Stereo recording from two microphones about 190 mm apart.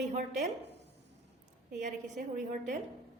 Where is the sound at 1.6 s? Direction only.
45° right (ahead or behind).